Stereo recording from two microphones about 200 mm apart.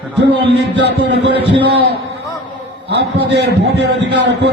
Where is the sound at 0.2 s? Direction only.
60° right (ahead or behind).